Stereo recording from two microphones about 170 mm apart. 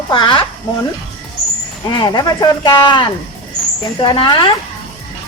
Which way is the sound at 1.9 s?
25° left (ahead or behind).